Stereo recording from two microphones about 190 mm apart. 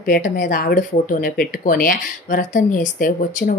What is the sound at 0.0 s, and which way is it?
Speech, 45° left (ahead or behind).